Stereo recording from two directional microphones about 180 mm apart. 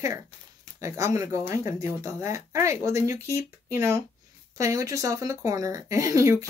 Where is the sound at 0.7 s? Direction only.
15° right (ahead or behind).